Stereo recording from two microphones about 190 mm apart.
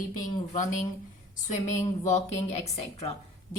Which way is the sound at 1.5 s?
40° left (ahead or behind).